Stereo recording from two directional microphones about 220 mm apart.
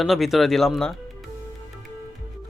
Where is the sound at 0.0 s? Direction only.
Centre (ahead or behind).